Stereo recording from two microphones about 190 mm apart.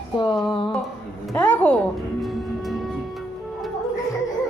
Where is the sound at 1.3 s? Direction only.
10° left (ahead or behind).